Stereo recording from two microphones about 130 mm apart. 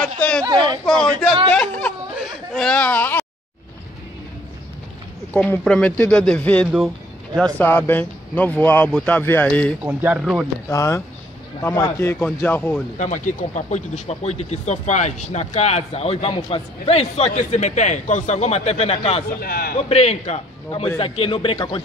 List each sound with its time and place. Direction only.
0.0 s a sound: 10° left (ahead or behind)
0.4 s speech: 35° right (ahead or behind)
0.8 s speech: 5° left (ahead or behind)
1.5 s a sound: 10° left (ahead or behind)
2.1 s chatter: centre (ahead or behind)
5.3 s speech: 15° left (ahead or behind)
9.8 s speech: 15° right (ahead or behind)
10.7 s speech: 25° left (ahead or behind)
12.9 s a man's voice: 70° left (ahead or behind); by 21.8 s 45° left (ahead or behind)